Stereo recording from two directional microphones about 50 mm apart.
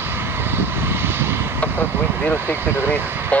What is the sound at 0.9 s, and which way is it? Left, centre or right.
Vehicle, right.